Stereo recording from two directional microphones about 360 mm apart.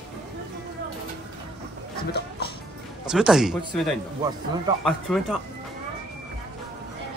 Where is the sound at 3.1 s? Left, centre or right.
Centre.